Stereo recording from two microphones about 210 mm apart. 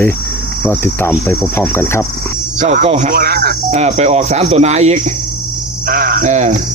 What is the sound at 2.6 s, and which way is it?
Speech, 35° right (ahead or behind).